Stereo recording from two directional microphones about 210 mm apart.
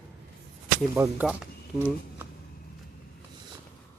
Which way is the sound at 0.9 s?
10° right (ahead or behind).